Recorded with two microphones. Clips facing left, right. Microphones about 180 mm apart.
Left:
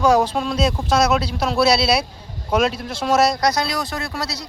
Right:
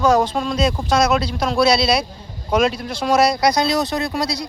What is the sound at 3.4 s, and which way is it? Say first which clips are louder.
Speech: right 4 dB; 15° right (ahead or behind).